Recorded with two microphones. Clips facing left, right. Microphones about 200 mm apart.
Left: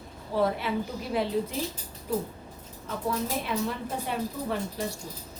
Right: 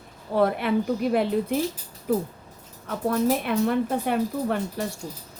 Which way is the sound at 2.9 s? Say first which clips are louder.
Right 7 dB; 60° right (ahead or behind).